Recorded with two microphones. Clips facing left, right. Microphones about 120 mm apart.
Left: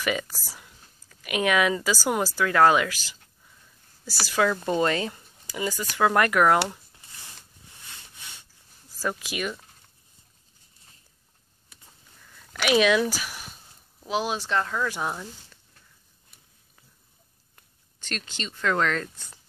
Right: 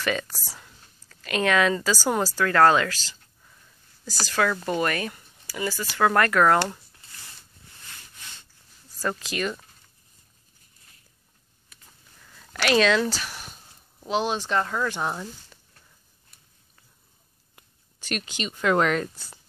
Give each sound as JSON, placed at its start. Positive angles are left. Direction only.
{"t": 0.0, "sound": "speech", "side_deg": 15}
{"t": 7.8, "sound": "rub", "side_deg": 15}
{"t": 9.0, "sound": "speech", "side_deg": 10}
{"t": 12.5, "sound": "speech", "side_deg": 10}
{"t": 17.6, "sound": "speech", "side_deg": -10}